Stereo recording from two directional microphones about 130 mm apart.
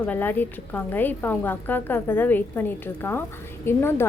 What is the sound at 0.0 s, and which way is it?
A woman's voice, 15° left (ahead or behind).